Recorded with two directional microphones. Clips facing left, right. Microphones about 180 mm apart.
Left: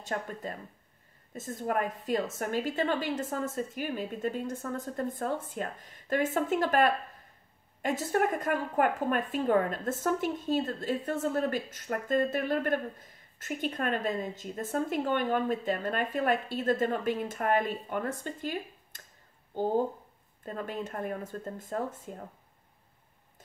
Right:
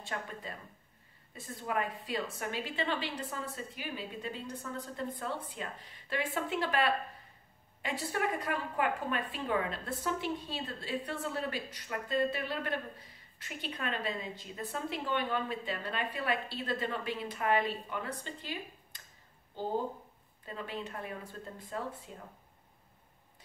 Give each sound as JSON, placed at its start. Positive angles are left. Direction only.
{"t": 0.0, "sound": "speech", "side_deg": 45}